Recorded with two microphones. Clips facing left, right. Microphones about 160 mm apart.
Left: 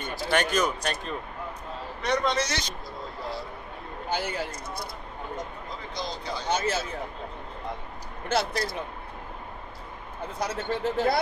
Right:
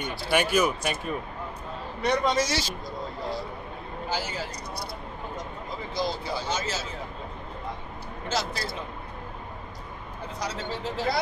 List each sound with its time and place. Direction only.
0.3 s speech: 10° right (ahead or behind)
4.1 s speech: 60° left (ahead or behind)
5.9 s speech: 5° right (ahead or behind)
6.5 s speech: 60° left (ahead or behind)
8.3 s speech: 60° left (ahead or behind)
10.4 s speech: 55° left (ahead or behind)